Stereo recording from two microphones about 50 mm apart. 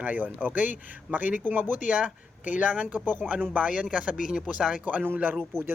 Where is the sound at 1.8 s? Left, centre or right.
Right.